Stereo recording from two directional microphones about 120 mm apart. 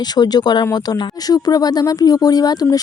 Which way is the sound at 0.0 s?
35° left (ahead or behind).